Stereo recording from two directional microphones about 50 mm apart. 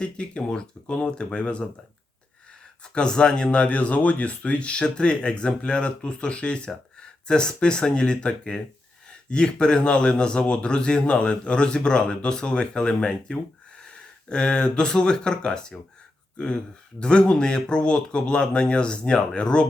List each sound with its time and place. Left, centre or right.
0.0 s speech: centre
2.8 s speech: centre
17.0 s speech: centre